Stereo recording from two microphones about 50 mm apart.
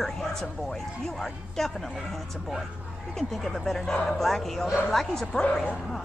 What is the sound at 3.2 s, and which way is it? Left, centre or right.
Speech, centre.